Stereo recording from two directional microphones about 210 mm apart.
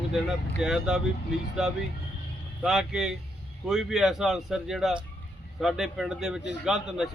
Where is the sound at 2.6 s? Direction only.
5° right (ahead or behind).